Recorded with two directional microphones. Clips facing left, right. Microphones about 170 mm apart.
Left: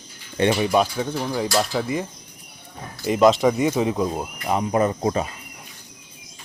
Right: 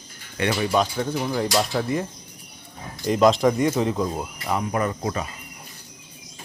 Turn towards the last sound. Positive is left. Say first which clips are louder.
# left 5 dB
turn(degrees=30)  # may be behind; listen again after turning